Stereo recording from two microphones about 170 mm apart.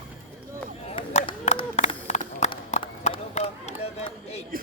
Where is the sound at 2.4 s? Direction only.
40° left (ahead or behind).